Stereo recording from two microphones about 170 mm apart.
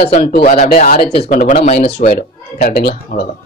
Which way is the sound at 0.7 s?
55° left (ahead or behind).